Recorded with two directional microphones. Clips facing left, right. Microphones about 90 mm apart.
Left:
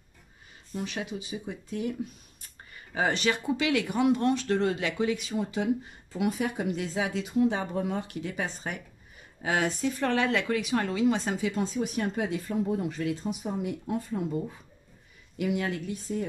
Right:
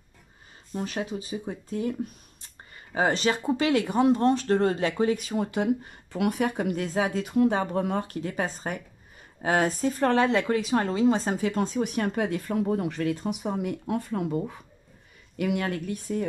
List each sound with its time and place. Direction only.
0.7 s speech: 40° right (ahead or behind)
11.4 s speech: 55° right (ahead or behind)
15.3 s speech: 60° right (ahead or behind)